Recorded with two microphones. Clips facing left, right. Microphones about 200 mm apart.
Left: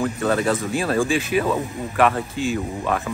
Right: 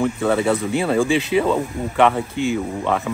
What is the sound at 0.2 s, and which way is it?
Speech, 15° right (ahead or behind).